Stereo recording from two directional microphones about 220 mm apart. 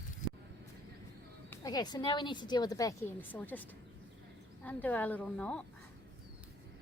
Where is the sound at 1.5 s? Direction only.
15° left (ahead or behind).